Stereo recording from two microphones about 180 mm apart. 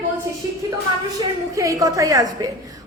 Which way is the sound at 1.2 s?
20° right (ahead or behind).